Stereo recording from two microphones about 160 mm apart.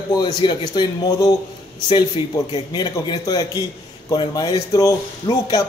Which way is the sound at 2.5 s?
25° left (ahead or behind).